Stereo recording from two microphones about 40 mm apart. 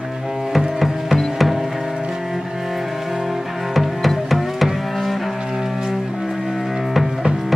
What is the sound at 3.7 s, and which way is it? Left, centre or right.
Music, centre.